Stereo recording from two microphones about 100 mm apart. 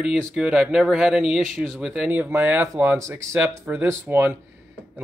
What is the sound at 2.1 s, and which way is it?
Speech, 20° right (ahead or behind).